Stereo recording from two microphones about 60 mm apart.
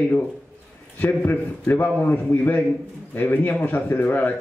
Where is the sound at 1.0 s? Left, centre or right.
Left.